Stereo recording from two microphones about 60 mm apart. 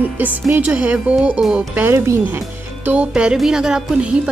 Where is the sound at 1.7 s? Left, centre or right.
Right.